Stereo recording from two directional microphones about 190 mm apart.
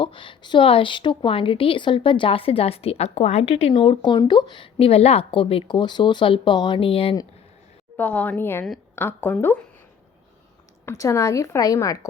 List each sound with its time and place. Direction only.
0.0 s a woman's voice: 25° left (ahead or behind)
7.9 s a woman's voice: 5° left (ahead or behind)
10.8 s a woman's voice: 15° left (ahead or behind)